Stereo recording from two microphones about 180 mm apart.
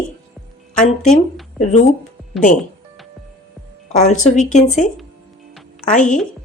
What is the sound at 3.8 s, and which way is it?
Speech, 40° left (ahead or behind).